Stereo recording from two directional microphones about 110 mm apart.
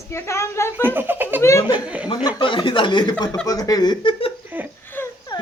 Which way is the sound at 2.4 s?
50° left (ahead or behind).